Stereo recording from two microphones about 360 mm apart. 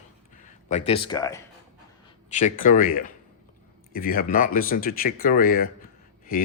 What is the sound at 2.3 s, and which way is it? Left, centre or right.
Speech, left.